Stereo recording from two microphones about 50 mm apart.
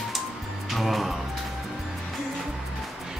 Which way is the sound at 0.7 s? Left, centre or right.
Centre.